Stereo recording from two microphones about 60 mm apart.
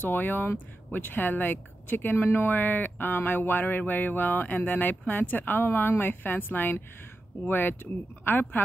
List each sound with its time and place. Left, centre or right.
0.0 s speech: left